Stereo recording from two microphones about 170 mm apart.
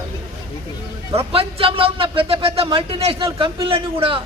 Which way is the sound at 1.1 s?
35° right (ahead or behind).